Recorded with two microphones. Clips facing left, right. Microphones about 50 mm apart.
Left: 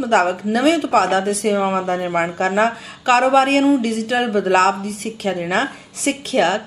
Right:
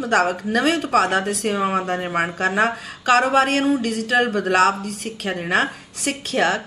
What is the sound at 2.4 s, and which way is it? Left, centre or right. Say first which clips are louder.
A woman's voice: left 2 dB; left.